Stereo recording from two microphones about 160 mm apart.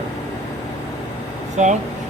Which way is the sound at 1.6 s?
45° right (ahead or behind).